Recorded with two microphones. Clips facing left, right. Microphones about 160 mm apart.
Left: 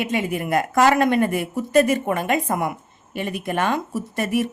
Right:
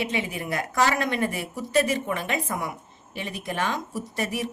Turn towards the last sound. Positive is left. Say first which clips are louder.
# left 6 dB
turn(degrees=55)  # may be behind; listen again after turning